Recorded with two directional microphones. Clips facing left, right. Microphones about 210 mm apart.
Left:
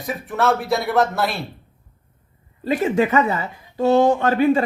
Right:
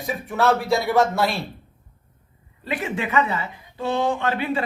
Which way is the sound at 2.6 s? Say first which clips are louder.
Left 8 dB; 40° left (ahead or behind).